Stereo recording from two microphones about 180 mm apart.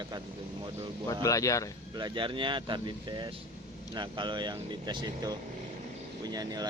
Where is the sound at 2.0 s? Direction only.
25° right (ahead or behind).